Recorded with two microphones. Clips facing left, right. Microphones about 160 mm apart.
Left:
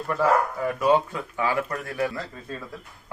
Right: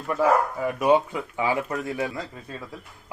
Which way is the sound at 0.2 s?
20° right (ahead or behind).